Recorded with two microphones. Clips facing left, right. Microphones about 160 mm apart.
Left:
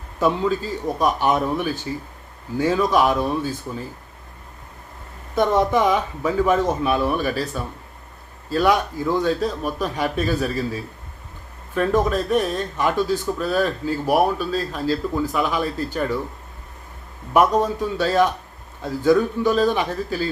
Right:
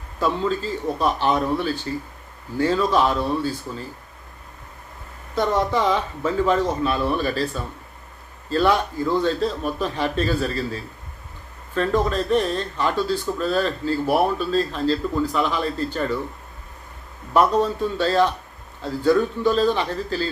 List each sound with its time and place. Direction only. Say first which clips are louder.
0.2 s speech: left 2 dB; 15° left (ahead or behind)
5.3 s speech: left 3 dB; 20° left (ahead or behind)
17.3 s speech: left 1 dB; 15° left (ahead or behind)